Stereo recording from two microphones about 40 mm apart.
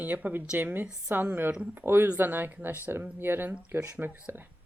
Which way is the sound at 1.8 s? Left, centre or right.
Right.